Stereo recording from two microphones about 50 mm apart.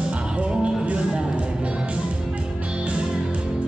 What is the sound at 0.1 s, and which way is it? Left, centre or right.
Music, right.